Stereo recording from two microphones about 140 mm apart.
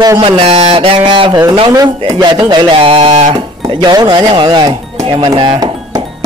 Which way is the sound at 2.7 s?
40° right (ahead or behind).